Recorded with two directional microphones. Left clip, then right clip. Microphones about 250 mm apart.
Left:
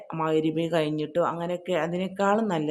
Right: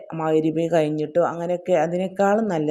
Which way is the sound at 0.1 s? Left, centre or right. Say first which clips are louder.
Right 4 dB; centre.